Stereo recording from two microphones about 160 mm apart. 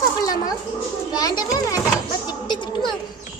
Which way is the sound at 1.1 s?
25° left (ahead or behind).